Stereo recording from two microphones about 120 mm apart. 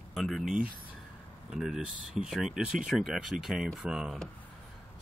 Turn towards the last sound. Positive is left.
turn(degrees=-5)  # may be behind; listen again after turning